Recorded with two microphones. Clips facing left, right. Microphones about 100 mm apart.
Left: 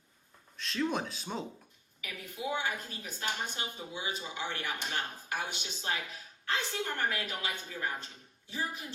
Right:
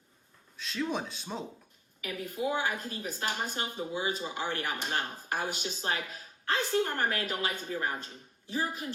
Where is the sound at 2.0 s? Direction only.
45° right (ahead or behind).